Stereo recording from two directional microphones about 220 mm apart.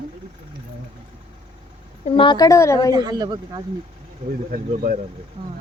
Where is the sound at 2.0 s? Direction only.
25° left (ahead or behind).